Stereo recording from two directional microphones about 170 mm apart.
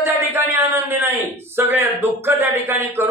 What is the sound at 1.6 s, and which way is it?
Speech, 15° right (ahead or behind).